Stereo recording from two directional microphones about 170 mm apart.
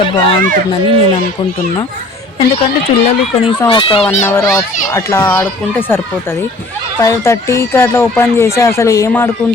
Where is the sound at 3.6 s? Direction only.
25° left (ahead or behind).